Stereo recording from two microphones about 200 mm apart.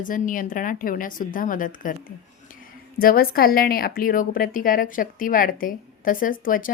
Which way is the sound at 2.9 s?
50° left (ahead or behind).